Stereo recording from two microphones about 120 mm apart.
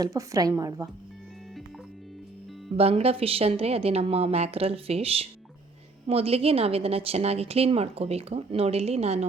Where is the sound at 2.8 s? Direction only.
55° right (ahead or behind).